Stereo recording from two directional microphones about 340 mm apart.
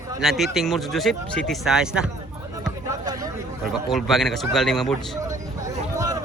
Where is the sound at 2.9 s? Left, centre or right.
Centre.